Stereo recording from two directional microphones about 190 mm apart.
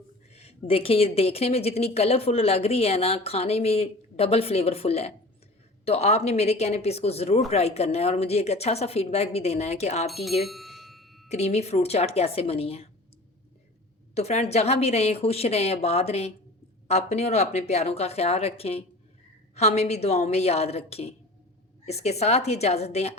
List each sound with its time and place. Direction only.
0.7 s a woman's voice: 30° left (ahead or behind)
10.4 s a sound: centre (ahead or behind)
11.3 s a woman's voice: 35° left (ahead or behind)
14.1 s a woman's voice: 35° left (ahead or behind)